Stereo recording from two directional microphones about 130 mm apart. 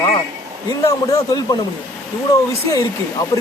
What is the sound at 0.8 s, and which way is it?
Speech, 25° left (ahead or behind).